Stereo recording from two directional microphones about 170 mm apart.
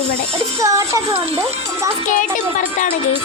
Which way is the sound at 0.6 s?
20° right (ahead or behind).